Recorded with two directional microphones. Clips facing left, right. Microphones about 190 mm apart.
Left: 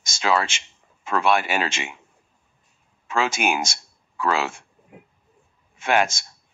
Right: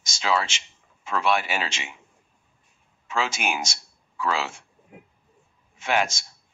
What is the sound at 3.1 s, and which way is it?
Speech, 55° left (ahead or behind).